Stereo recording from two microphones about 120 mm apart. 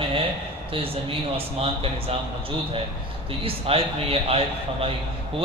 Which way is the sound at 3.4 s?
55° right (ahead or behind).